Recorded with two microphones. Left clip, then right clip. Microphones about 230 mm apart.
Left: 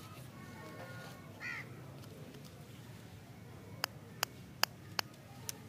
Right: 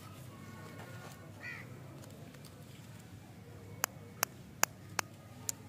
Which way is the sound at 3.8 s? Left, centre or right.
Centre.